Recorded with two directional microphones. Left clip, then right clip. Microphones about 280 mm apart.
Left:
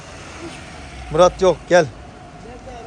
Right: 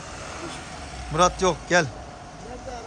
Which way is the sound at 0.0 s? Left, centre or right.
Right.